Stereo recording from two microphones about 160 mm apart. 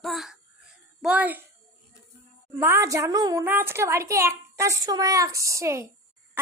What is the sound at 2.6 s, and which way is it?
A child's voice, 15° right (ahead or behind).